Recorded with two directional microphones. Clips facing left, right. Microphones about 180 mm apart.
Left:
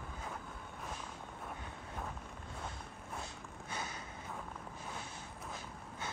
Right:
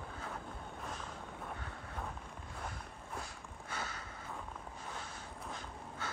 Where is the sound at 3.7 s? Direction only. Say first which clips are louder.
Even; 20° left (ahead or behind).